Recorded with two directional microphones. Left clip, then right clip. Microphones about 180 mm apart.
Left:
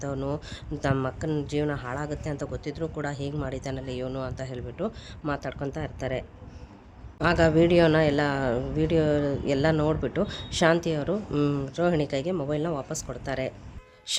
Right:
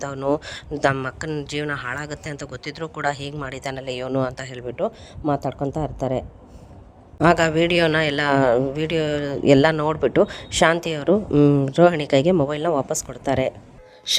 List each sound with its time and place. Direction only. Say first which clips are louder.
0.3 s a man's voice: right 8 dB; 50° right (ahead or behind)
5.3 s speech: right 8 dB; 30° right (ahead or behind)
7.2 s a man's voice: right 4 dB; 45° right (ahead or behind)
11.7 s a man's voice: right 10 dB; 50° right (ahead or behind)
14.1 s music: right 9 dB; 40° right (ahead or behind)